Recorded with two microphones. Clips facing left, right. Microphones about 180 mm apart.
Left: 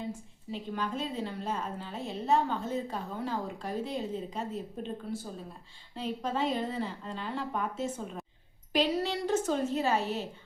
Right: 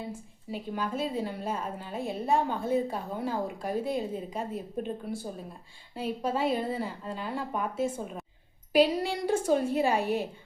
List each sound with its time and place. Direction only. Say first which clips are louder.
0.0 s a woman's voice: even; 10° right (ahead or behind)